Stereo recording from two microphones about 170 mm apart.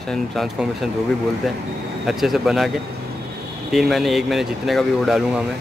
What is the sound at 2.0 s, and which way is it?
Speech, centre (ahead or behind).